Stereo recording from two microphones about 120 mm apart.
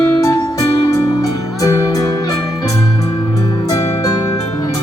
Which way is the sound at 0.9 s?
30° left (ahead or behind).